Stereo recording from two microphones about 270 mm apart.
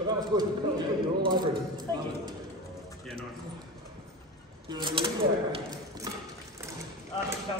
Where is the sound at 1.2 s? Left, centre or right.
Centre.